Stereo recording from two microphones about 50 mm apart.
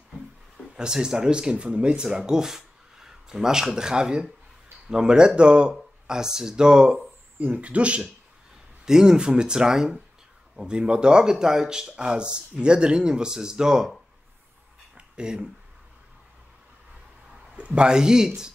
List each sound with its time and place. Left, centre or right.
0.7 s speech: centre
7.3 s speech: right
8.8 s speech: centre
15.0 s a sound: centre
17.6 s speech: right